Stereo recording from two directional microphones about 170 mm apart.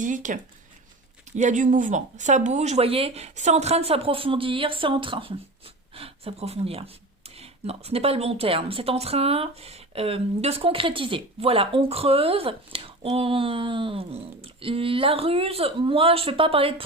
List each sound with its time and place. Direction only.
0.0 s speech: 50° right (ahead or behind)
1.4 s a woman's voice: 45° right (ahead or behind)